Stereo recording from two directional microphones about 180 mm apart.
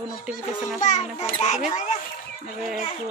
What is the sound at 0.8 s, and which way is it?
Speech, 40° left (ahead or behind).